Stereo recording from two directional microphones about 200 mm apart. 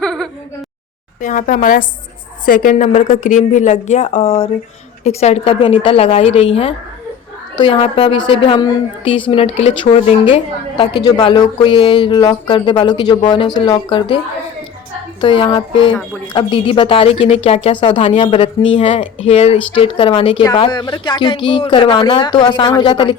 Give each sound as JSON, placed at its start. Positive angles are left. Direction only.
{"t": 0.0, "sound": "whimper", "side_deg": 5}
{"t": 1.2, "sound": "a woman's voice", "side_deg": 40}
{"t": 15.2, "sound": "a woman's voice", "side_deg": 25}